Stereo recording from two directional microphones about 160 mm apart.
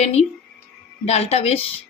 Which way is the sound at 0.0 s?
40° left (ahead or behind).